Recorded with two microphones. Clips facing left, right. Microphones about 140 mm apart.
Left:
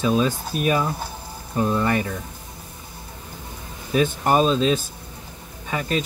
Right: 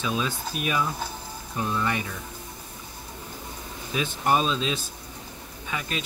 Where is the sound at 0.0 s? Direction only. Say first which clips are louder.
Left 8 dB; 40° left (ahead or behind).